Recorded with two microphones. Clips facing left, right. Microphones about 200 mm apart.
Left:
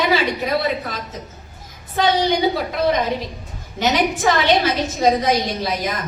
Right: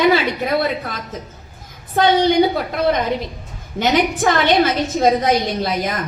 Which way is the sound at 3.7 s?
50° right (ahead or behind).